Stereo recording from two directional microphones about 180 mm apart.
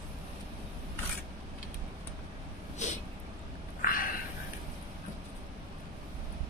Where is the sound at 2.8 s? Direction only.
40° left (ahead or behind).